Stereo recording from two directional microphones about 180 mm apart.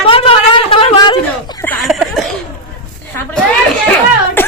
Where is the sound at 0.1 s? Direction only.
30° left (ahead or behind).